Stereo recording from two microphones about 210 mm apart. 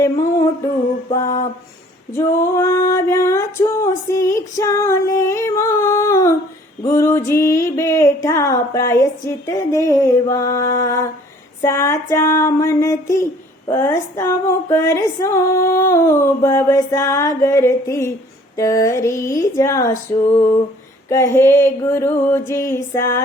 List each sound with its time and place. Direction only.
0.0 s music: 15° left (ahead or behind)
1.1 s female singing: 15° left (ahead or behind)
2.1 s a sound: 10° left (ahead or behind)
6.8 s female singing: 10° left (ahead or behind)
7.3 s music: 10° left (ahead or behind)
11.6 s female singing: 10° left (ahead or behind)